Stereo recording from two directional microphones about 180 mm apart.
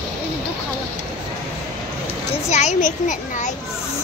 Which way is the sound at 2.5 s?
40° left (ahead or behind).